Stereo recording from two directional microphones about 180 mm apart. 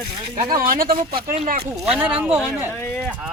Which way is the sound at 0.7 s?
55° right (ahead or behind).